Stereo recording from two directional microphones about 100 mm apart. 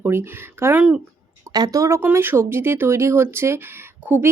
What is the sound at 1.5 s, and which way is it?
Speech, 40° right (ahead or behind).